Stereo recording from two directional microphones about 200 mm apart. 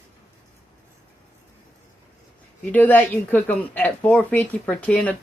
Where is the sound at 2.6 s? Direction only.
10° left (ahead or behind).